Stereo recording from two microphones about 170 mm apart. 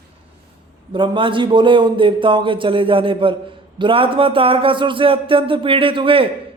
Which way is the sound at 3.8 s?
30° right (ahead or behind).